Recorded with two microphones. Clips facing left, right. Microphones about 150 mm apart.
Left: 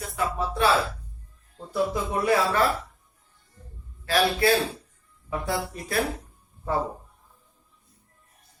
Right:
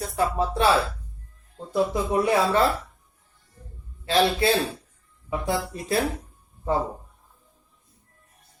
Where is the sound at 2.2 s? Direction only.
25° right (ahead or behind).